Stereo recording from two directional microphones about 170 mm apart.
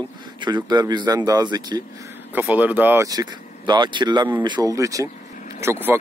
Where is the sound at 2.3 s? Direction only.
10° right (ahead or behind).